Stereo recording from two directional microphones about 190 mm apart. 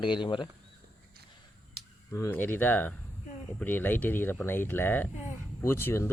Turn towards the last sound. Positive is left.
turn(degrees=15)  # may be behind; listen again after turning